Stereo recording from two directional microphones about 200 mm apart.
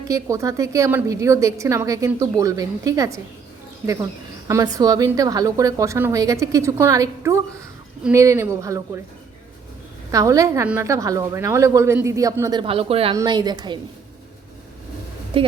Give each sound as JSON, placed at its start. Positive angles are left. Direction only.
{"t": 0.1, "sound": "a woman's voice", "side_deg": -15}
{"t": 4.4, "sound": "a woman's voice", "side_deg": -15}
{"t": 10.1, "sound": "a woman's voice", "side_deg": -15}
{"t": 15.3, "sound": "speech", "side_deg": -25}